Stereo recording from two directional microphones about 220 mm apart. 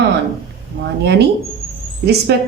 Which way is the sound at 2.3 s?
50° right (ahead or behind).